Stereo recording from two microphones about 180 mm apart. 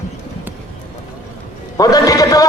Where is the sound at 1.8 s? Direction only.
20° left (ahead or behind).